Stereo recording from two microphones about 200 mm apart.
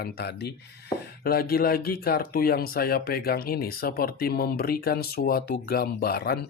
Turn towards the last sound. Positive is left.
turn(degrees=50)  # may be behind; listen again after turning